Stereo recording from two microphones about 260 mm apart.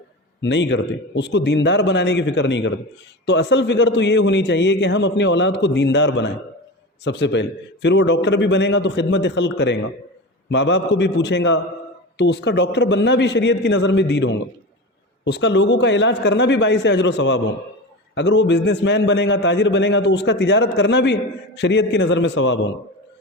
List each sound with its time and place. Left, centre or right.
0.4 s a man's voice: left